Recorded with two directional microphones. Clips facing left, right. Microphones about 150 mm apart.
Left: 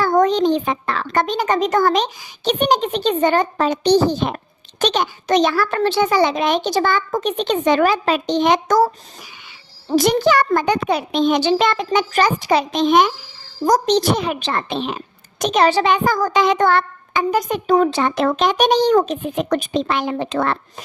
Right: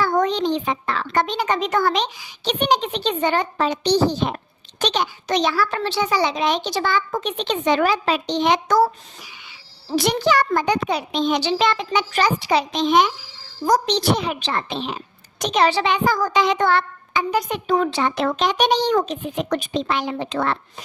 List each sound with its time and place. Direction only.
0.0 s a child's voice: 45° left (ahead or behind)